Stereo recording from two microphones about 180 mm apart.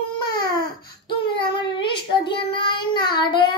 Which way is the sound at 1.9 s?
25° left (ahead or behind).